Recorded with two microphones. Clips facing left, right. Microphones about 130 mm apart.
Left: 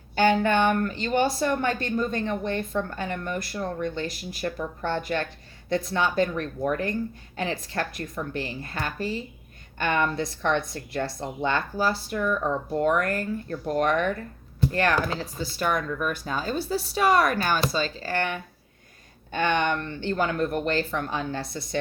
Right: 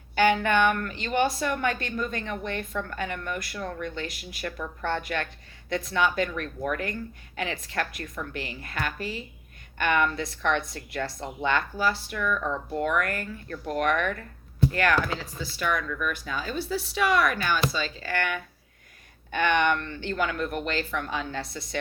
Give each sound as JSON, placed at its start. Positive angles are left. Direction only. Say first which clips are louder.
{"t": 0.2, "sound": "a woman's voice", "louder": "left 1 dB", "side_deg": 30}